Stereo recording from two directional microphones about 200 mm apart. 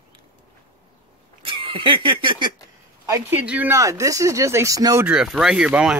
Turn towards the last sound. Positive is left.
turn(degrees=-5)  # may be behind; listen again after turning